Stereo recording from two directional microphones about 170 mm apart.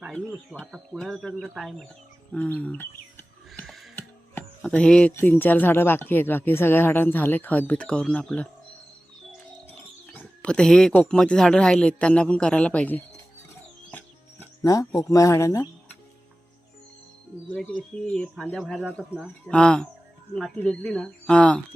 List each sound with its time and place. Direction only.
0.0 s speech: centre (ahead or behind)
3.2 s a sound: 5° left (ahead or behind)
3.9 s speech: 10° left (ahead or behind)
10.1 s speech: 5° left (ahead or behind)
13.9 s music: 15° left (ahead or behind)
17.5 s speech: 5° left (ahead or behind)